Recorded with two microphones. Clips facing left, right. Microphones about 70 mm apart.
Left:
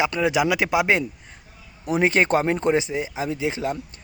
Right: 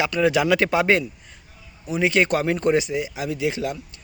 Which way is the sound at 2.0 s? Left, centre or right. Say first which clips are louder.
Left 1 dB; left.